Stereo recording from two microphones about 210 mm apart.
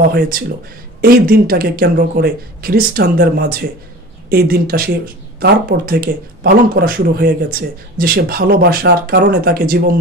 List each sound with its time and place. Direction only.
0.1 s speech: 45° right (ahead or behind)